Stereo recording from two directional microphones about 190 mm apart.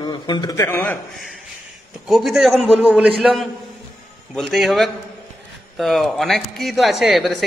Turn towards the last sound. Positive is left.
turn(degrees=0)  # may be behind; listen again after turning